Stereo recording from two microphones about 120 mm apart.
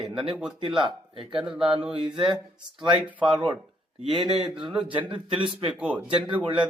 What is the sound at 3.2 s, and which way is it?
Speech, 40° right (ahead or behind).